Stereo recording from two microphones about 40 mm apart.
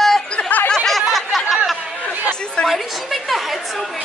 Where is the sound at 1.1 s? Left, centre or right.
Centre.